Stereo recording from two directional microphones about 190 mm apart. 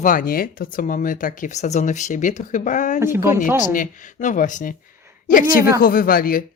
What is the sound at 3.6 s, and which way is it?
A woman's voice, 45° left (ahead or behind).